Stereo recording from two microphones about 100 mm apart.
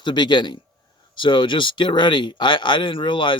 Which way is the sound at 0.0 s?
50° left (ahead or behind).